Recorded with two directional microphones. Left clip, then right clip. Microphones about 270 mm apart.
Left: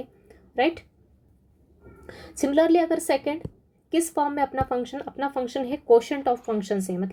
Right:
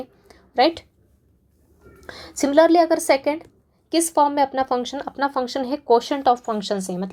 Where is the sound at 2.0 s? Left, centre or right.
Right.